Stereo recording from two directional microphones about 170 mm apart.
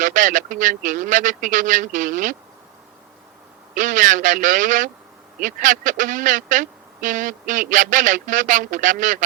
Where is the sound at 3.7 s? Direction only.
50° right (ahead or behind).